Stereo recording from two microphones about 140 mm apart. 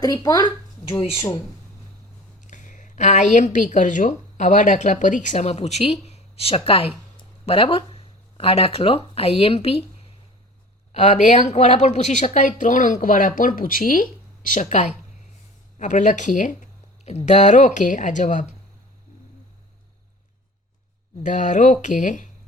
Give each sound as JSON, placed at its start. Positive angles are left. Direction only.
{"t": 0.0, "sound": "speech", "side_deg": 25}
{"t": 0.9, "sound": "speech", "side_deg": 40}
{"t": 2.5, "sound": "a woman's voice", "side_deg": 65}
{"t": 10.9, "sound": "a woman's voice", "side_deg": 55}
{"t": 17.1, "sound": "a woman's voice", "side_deg": 55}
{"t": 21.2, "sound": "a woman's voice", "side_deg": 65}